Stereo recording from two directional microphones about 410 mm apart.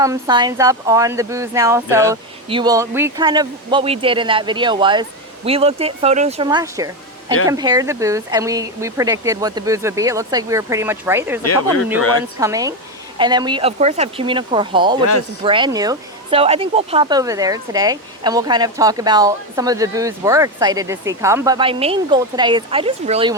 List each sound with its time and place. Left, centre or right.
0.0 s speech: centre
11.4 s speech: left
12.4 s speech: centre